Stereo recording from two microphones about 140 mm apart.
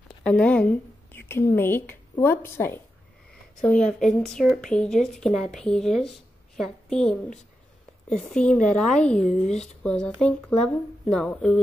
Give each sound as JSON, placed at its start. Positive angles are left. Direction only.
{"t": 0.2, "sound": "a woman's voice", "side_deg": 10}
{"t": 3.6, "sound": "a woman's voice", "side_deg": 5}